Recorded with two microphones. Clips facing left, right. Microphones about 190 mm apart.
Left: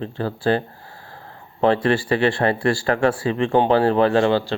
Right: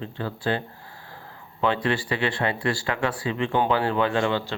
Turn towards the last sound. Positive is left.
turn(degrees=35)  # may be behind; listen again after turning